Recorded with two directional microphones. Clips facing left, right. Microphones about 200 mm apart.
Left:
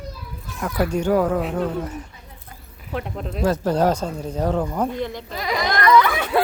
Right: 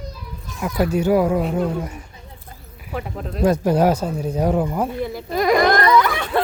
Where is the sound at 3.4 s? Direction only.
15° right (ahead or behind).